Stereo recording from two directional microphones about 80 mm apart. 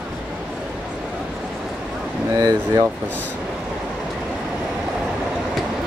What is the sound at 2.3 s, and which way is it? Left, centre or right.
Speech, right.